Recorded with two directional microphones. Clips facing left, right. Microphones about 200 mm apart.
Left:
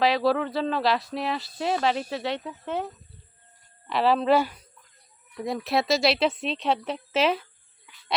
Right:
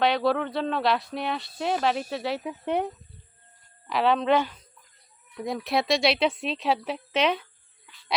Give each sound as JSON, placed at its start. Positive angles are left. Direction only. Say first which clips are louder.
{"t": 0.0, "sound": "speech", "louder": "left 1 dB", "side_deg": 0}
{"t": 2.4, "sound": "speech", "louder": "right 4 dB", "side_deg": -15}
{"t": 3.8, "sound": "speech", "louder": "left 1 dB", "side_deg": 0}